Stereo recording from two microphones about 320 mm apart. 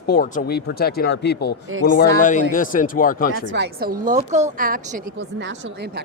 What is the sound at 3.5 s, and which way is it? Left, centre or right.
A woman's voice, right.